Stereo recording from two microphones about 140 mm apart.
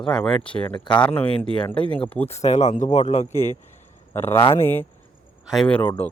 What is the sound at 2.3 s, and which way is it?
Speech, 50° left (ahead or behind).